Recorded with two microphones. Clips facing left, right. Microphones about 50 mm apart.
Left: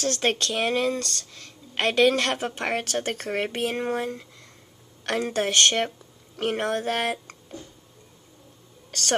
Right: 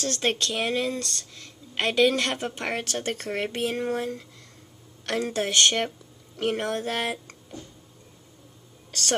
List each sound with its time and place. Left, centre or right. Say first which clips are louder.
0.0 s a woman's voice: left 2 dB; centre